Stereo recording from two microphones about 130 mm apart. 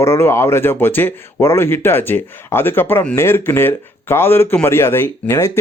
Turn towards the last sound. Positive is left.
turn(degrees=20)  # may be behind; listen again after turning